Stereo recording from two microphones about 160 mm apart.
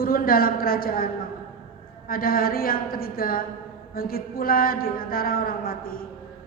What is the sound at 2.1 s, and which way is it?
A man's voice, 65° left (ahead or behind).